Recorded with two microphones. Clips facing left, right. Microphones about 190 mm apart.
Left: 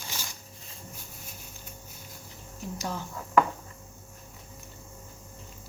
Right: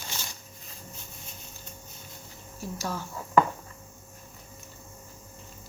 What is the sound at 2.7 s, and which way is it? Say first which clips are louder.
Speech: right 1 dB; 15° left (ahead or behind).